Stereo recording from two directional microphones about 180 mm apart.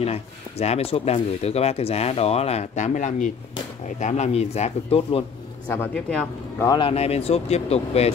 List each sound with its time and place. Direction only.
0.0 s speech: 35° left (ahead or behind)
5.7 s speech: 10° left (ahead or behind)
6.8 s speech: 35° left (ahead or behind)